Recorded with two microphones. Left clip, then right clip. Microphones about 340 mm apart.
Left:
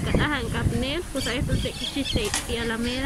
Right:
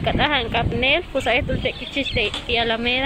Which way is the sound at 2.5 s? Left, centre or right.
Centre.